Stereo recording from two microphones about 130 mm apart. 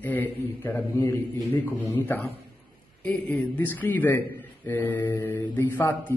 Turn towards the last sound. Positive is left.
turn(degrees=15)  # may be behind; listen again after turning